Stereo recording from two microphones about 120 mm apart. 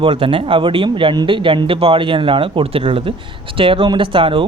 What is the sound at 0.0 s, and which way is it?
Speech, 45° right (ahead or behind).